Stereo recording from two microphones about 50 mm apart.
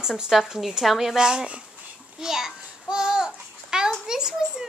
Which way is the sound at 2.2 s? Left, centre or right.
Centre.